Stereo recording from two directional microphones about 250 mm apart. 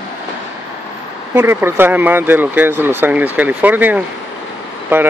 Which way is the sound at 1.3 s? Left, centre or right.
Centre.